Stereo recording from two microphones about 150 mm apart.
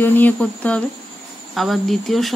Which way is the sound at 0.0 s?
10° left (ahead or behind).